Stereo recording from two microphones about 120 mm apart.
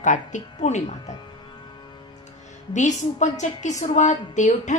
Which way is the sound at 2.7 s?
85° left.